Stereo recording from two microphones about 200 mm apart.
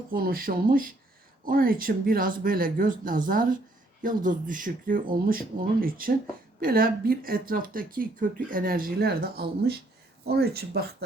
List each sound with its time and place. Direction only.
0.1 s speech: 45° right (ahead or behind)